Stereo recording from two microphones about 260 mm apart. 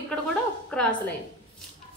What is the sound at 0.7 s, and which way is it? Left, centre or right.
Speech, centre.